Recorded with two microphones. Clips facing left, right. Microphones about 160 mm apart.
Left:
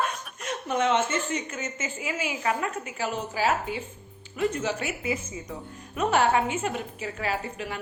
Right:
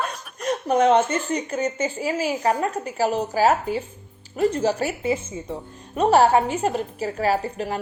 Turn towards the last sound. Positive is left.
turn(degrees=-40)  # may be behind; listen again after turning